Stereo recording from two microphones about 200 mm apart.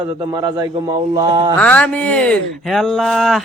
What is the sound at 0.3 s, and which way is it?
A man's voice, 25° right (ahead or behind).